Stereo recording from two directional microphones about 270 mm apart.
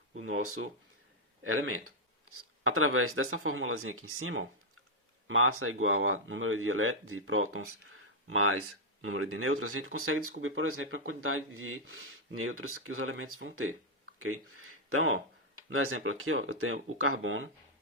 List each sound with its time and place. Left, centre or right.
0.2 s speech: right